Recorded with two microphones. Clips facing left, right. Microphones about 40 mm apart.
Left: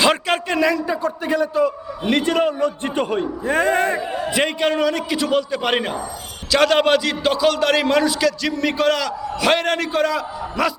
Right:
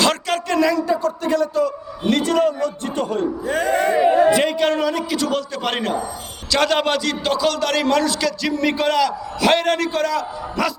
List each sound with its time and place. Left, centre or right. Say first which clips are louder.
0.0 s a sound: left 2 dB; centre
1.0 s a man's voice: right 1 dB; centre
3.4 s speech: left 2 dB; left
3.9 s a man's voice: right 10 dB; right
4.4 s a man's voice: even; centre
5.1 s a man's voice: left 2 dB; centre